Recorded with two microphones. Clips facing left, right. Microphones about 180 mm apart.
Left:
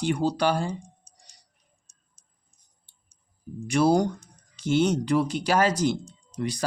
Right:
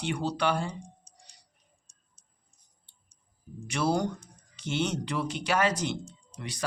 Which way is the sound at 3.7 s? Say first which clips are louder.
Left 7 dB; 40° left (ahead or behind).